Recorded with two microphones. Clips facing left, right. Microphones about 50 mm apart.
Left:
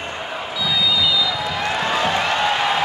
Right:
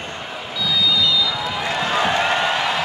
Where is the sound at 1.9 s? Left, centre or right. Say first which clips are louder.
Right 3 dB; centre.